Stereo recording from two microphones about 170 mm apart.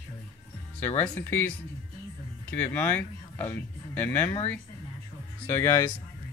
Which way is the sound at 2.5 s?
10° left (ahead or behind).